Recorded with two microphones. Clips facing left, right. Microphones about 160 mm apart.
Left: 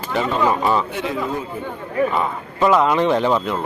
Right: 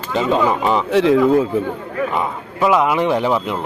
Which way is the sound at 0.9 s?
90° right.